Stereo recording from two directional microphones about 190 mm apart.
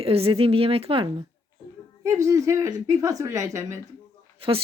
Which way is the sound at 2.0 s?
15° right (ahead or behind).